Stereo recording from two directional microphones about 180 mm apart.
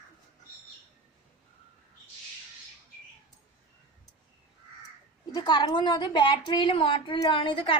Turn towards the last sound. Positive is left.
turn(degrees=30)  # may be behind; listen again after turning